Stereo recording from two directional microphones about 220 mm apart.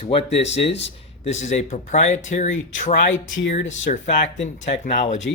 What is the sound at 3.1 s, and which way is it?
Speech, 60° left (ahead or behind).